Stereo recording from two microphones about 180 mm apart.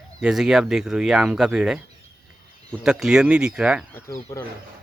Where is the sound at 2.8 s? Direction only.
5° right (ahead or behind).